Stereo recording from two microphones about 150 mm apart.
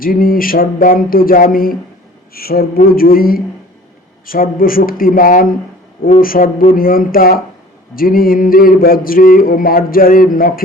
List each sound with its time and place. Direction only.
0.0 s mantra: 75° left (ahead or behind)
2.3 s mantra: 90° left; by 10.6 s 70° left (ahead or behind)